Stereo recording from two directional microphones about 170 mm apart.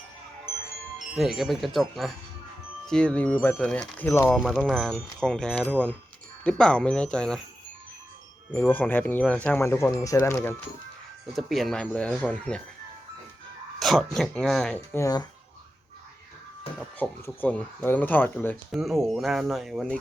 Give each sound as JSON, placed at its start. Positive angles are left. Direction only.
{"t": 1.1, "sound": "speech", "side_deg": 0}
{"t": 8.5, "sound": "speech", "side_deg": 10}
{"t": 11.3, "sound": "speech", "side_deg": 0}
{"t": 13.7, "sound": "speech", "side_deg": 0}
{"t": 14.9, "sound": "speech", "side_deg": 20}
{"t": 17.0, "sound": "speech", "side_deg": 10}
{"t": 18.7, "sound": "speech", "side_deg": 0}